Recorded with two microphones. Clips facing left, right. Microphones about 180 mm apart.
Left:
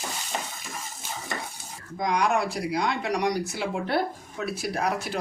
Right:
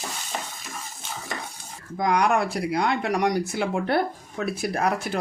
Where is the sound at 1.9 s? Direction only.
55° right (ahead or behind).